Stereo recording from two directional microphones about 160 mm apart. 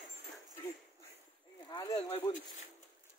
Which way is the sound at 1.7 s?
25° left (ahead or behind).